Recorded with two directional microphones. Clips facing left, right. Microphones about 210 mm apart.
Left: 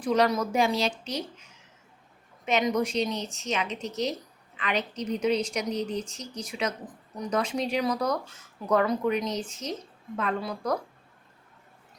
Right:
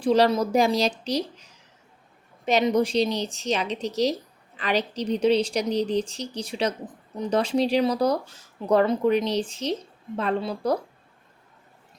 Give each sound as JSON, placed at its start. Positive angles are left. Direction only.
{"t": 0.0, "sound": "a woman's voice", "side_deg": -30}